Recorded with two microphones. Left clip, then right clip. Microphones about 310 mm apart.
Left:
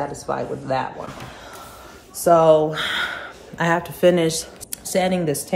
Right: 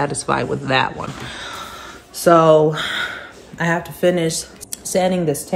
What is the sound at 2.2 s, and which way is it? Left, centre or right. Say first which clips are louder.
Speech: right 2 dB; right.